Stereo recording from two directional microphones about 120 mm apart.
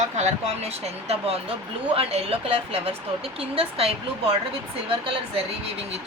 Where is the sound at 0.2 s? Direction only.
65° right (ahead or behind).